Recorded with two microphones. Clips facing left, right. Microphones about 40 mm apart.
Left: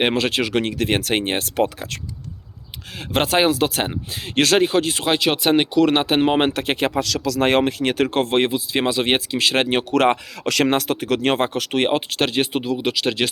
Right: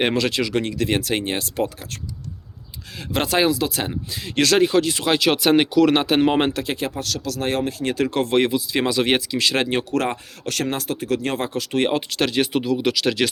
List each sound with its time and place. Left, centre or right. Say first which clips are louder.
0.0 s speech: left 1 dB; left
0.3 s speech: left 1 dB; left
3.2 s speech: left 2 dB; left
3.5 s speech: left 3 dB; left
3.8 s speech: left 1 dB; left
5.0 s speech: even; centre
6.5 s speech: left 4 dB; left
7.4 s speech: left 5 dB; left
8.0 s speech: even; left
8.4 s speech: even; left
10.6 s speech: left 6 dB; left
11.4 s speech: left 2 dB; left
11.9 s speech: left 1 dB; left